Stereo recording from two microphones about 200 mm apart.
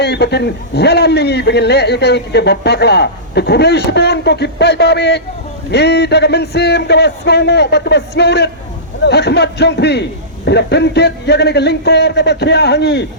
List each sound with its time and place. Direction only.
0.0 s a man's voice: 55° left (ahead or behind)